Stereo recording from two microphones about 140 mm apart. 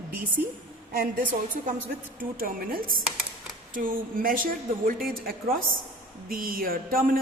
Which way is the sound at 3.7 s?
75° right (ahead or behind).